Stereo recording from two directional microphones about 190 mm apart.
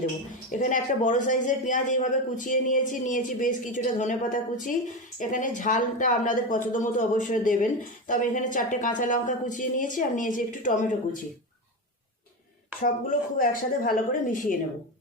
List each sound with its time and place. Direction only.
0.6 s speech: 45° left (ahead or behind)
12.8 s speech: 45° left (ahead or behind)